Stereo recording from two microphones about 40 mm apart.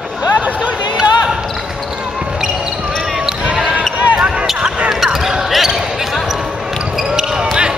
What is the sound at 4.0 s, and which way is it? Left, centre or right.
Basketball bounce, right.